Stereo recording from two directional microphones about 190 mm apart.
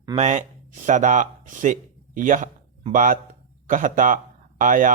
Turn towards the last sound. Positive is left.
turn(degrees=-45)  # may be behind; listen again after turning